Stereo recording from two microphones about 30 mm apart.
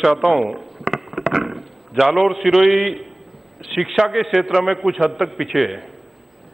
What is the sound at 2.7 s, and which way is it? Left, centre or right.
A man's voice, centre.